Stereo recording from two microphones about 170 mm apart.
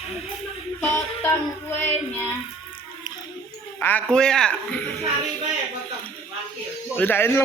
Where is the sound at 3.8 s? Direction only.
10° left (ahead or behind).